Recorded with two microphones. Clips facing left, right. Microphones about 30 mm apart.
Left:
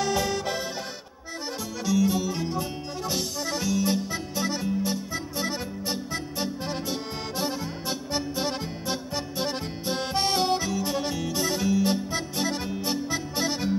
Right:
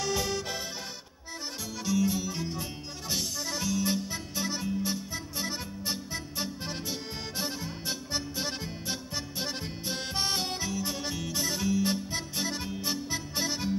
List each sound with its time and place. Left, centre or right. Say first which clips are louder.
0.0 s music: left 5 dB; centre
1.9 s music: left 5 dB; centre
3.1 s accordion: left 3 dB; centre
10.7 s music: left 6 dB; centre